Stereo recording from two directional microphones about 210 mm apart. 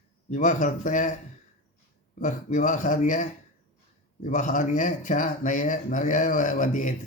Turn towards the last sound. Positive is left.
turn(degrees=40)  # may be behind; listen again after turning